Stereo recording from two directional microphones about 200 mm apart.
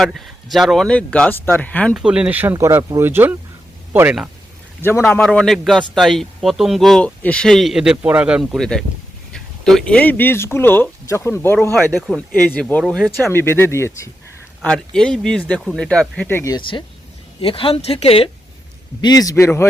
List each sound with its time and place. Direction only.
0.0 s speech: centre (ahead or behind)
1.9 s speech: 5° right (ahead or behind)
4.8 s speech: 10° left (ahead or behind); by 18.3 s 30° left (ahead or behind)
19.0 s speech: 20° left (ahead or behind)